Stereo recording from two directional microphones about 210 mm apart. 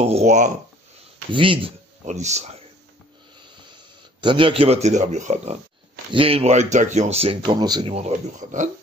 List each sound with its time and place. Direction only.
0.0 s a man's voice: 30° right (ahead or behind)
4.2 s a man's voice: 25° right (ahead or behind)